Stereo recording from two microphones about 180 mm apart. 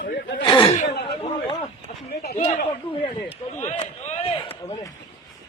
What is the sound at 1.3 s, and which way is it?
Speech, 25° left (ahead or behind).